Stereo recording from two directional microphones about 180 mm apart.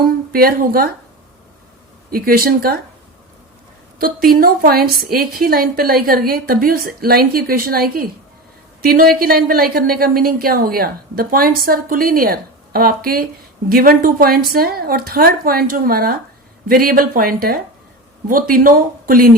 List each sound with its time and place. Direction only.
0.0 s a woman's voice: 55° right (ahead or behind)
2.0 s a woman's voice: 55° right (ahead or behind)
3.9 s a woman's voice: 55° right (ahead or behind)